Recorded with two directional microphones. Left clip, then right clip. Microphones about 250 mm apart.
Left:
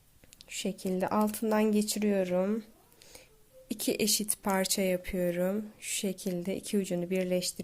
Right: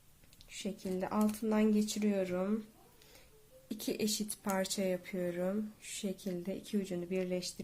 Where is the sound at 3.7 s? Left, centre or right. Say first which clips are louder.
Left 7 dB; left.